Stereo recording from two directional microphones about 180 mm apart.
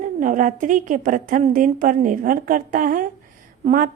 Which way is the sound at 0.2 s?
45° right (ahead or behind).